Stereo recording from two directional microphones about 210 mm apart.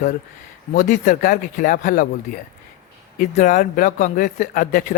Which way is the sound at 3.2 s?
40° left (ahead or behind).